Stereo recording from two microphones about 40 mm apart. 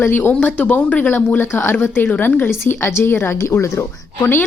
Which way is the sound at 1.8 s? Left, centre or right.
Left.